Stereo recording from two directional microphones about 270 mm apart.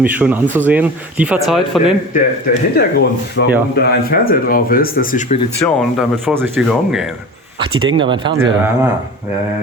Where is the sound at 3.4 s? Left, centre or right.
Left.